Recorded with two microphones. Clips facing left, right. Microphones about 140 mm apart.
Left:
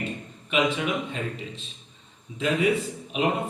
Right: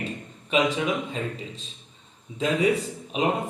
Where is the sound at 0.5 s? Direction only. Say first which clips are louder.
Right 1 dB; 40° right (ahead or behind).